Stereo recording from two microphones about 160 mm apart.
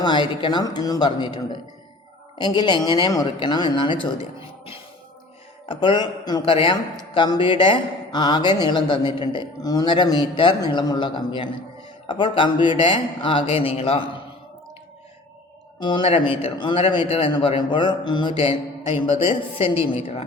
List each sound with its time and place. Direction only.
0.0 s speech: 30° left (ahead or behind)
2.4 s speech: 30° left (ahead or behind)
5.6 s a man's voice: 30° left (ahead or behind)
15.8 s a man's voice: 30° left (ahead or behind)